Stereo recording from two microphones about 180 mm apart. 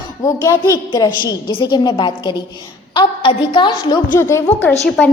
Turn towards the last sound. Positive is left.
turn(degrees=5)  # may be behind; listen again after turning